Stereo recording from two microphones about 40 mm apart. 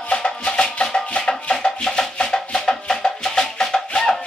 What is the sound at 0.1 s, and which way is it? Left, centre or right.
Music, left.